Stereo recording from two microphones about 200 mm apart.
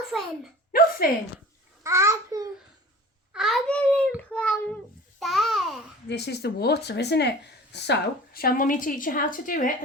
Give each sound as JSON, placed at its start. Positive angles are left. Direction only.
{"t": 0.0, "sound": "a child's voice", "side_deg": 0}
{"t": 1.0, "sound": "speech", "side_deg": 45}
{"t": 1.8, "sound": "a child's voice", "side_deg": -15}
{"t": 3.3, "sound": "a sound", "side_deg": 0}
{"t": 4.2, "sound": "child singing", "side_deg": 5}
{"t": 5.2, "sound": "babbling", "side_deg": 0}
{"t": 6.1, "sound": "speech", "side_deg": 55}